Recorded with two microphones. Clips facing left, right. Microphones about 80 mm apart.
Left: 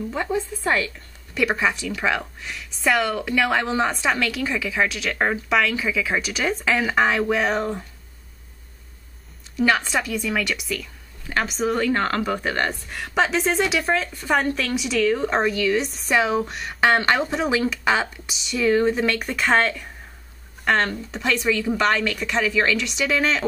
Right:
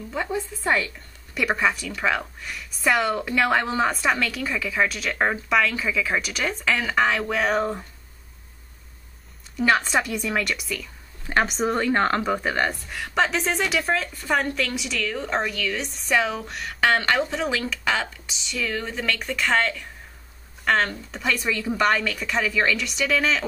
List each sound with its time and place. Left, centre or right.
0.1 s a woman's voice: centre
9.6 s speech: centre
11.7 s a woman's voice: centre
18.7 s a woman's voice: centre
19.3 s speech: centre